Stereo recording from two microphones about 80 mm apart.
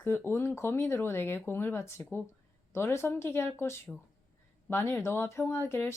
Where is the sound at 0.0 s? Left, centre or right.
Left.